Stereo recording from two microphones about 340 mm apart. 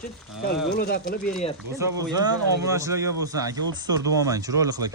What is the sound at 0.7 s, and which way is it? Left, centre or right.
Speech, left.